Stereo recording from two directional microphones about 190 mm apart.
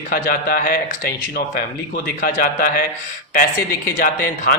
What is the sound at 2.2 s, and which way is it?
Speech, 50° left (ahead or behind).